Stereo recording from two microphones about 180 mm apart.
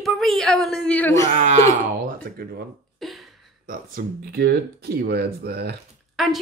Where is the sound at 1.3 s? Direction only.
40° right (ahead or behind).